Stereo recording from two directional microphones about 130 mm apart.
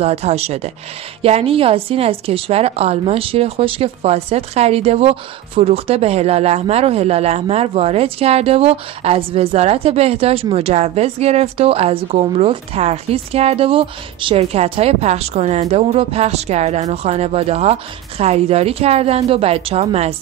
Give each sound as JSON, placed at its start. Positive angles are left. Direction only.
{"t": 0.0, "sound": "speech", "side_deg": -55}